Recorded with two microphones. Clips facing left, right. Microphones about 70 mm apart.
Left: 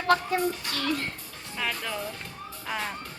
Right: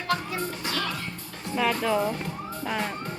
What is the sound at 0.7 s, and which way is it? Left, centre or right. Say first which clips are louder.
Music: left 1 dB; right.